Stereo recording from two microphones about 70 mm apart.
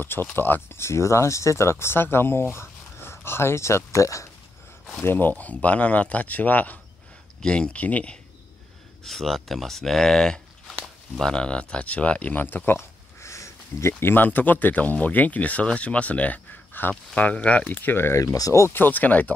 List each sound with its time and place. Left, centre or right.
0.0 s speech: left
5.0 s speech: left
9.0 s speech: centre; by 18.8 s left
18.8 s speech: left